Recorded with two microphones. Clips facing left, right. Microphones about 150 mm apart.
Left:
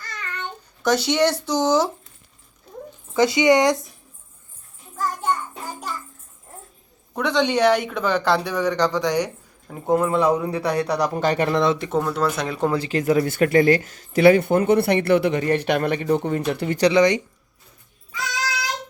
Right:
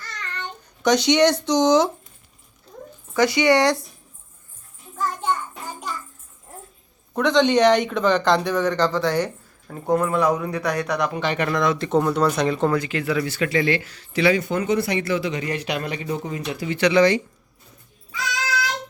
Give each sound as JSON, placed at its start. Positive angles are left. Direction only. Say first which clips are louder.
{"t": 0.2, "sound": "babbling", "louder": "left 1 dB", "side_deg": 10}
{"t": 3.2, "sound": "speech", "louder": "left 1 dB", "side_deg": 20}
{"t": 4.9, "sound": "child singing", "louder": "even", "side_deg": 5}
{"t": 7.2, "sound": "speech", "louder": "right 3 dB", "side_deg": 10}
{"t": 11.4, "sound": "speech", "louder": "even", "side_deg": 25}
{"t": 11.9, "sound": "speech", "louder": "right 3 dB", "side_deg": 0}
{"t": 12.7, "sound": "speech", "louder": "left 3 dB", "side_deg": 35}
{"t": 16.9, "sound": "speech", "louder": "right 2 dB", "side_deg": 20}